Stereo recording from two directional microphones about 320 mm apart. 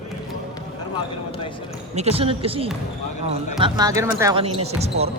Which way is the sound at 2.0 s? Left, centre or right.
Centre.